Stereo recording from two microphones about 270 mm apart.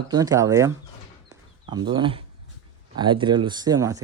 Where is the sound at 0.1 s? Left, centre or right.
Centre.